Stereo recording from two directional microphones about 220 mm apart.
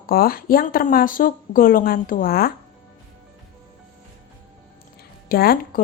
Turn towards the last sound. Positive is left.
turn(degrees=45)  # may be behind; listen again after turning